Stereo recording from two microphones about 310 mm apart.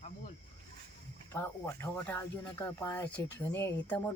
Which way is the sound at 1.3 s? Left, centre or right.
Centre.